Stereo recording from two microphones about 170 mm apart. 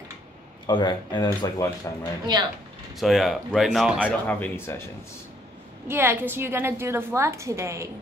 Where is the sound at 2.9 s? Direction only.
Centre (ahead or behind).